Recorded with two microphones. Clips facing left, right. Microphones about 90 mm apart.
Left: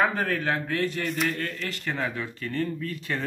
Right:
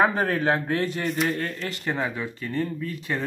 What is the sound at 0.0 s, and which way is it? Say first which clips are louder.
Speech: right 3 dB; 25° right (ahead or behind).